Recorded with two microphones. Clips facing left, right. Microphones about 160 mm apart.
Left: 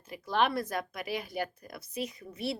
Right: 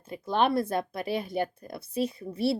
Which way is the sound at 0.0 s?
25° right (ahead or behind).